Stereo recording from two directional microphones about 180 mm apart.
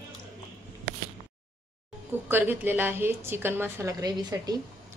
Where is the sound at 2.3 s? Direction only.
10° right (ahead or behind).